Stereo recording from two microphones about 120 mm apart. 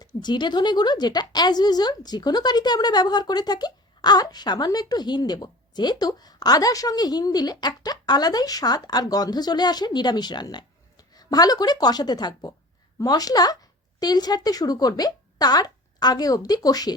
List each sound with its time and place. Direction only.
0.0 s a woman's voice: 40° left (ahead or behind)